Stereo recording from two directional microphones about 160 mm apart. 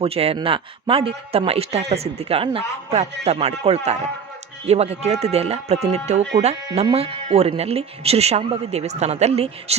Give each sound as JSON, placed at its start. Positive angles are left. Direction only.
{"t": 0.0, "sound": "a man's voice", "side_deg": -40}